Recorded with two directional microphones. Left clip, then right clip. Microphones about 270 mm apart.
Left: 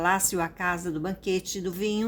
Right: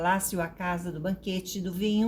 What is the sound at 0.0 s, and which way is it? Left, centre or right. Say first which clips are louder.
A woman's voice: left 2 dB; left.